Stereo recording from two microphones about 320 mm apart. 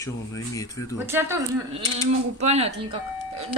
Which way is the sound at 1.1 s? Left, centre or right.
Centre.